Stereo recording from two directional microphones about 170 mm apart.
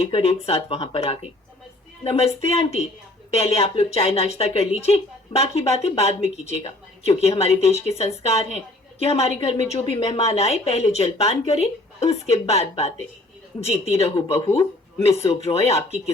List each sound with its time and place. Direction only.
0.0 s a woman's voice: 35° left (ahead or behind)
15.4 s a woman's voice: 40° left (ahead or behind)